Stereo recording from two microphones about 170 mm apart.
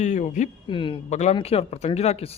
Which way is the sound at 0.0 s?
45° left (ahead or behind).